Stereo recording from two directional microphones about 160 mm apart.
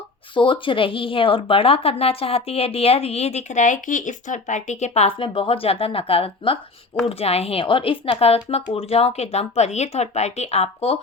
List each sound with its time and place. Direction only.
0.3 s speech: 30° left (ahead or behind)